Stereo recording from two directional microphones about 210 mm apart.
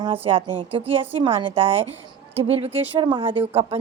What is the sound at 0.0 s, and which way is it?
A woman's voice, 25° right (ahead or behind).